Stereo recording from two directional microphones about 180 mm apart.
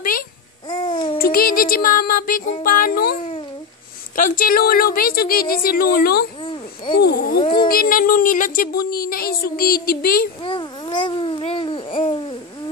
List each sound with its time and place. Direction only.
0.7 s babbling: 25° left (ahead or behind)
1.1 s music: 55° left (ahead or behind)
4.2 s speech: 50° left (ahead or behind)
6.4 s a sound: 25° left (ahead or behind)
7.0 s speech: 60° left (ahead or behind)
7.3 s speech: 25° left (ahead or behind)
7.6 s speech: 55° left (ahead or behind)
10.4 s babbling: 25° left (ahead or behind)